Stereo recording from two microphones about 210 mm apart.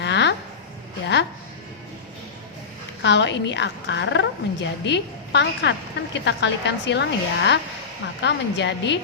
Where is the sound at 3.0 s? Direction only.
55° left (ahead or behind).